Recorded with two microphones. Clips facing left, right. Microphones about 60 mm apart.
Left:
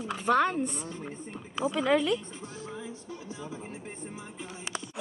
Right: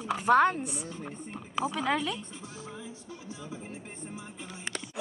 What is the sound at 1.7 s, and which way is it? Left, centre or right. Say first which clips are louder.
Speech: left 7 dB; centre.